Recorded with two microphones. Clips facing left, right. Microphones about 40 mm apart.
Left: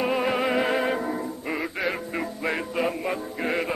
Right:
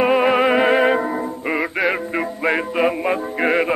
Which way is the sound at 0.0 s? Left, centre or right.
Right.